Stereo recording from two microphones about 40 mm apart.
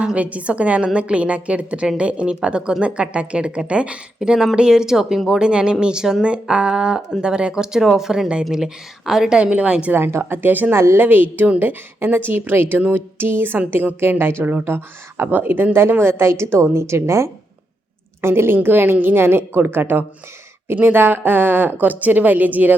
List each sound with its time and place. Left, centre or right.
0.0 s a woman's voice: right
4.2 s a woman's voice: centre
9.5 s a woman's voice: right
9.9 s a woman's voice: right
10.8 s a woman's voice: right
14.4 s a woman's voice: right
18.2 s a woman's voice: right